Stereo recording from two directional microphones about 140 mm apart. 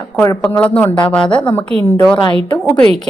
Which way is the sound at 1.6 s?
45° right (ahead or behind).